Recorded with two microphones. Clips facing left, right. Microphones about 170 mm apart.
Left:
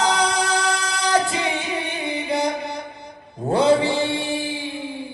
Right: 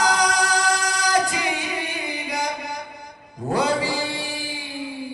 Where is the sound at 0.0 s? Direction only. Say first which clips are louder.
Even; 25° left (ahead or behind).